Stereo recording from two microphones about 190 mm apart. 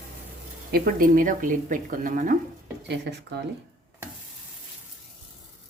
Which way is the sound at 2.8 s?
60° right (ahead or behind).